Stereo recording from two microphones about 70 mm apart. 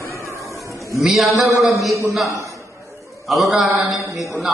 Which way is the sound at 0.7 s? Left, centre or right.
Left.